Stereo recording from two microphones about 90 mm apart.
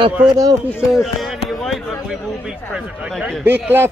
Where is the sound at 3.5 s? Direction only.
25° right (ahead or behind).